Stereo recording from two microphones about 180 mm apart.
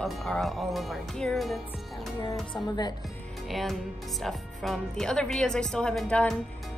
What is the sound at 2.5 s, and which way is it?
Speech, 25° left (ahead or behind).